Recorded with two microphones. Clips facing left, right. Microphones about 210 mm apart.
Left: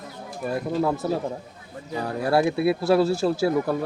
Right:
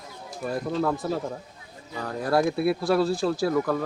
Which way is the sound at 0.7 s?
10° left (ahead or behind).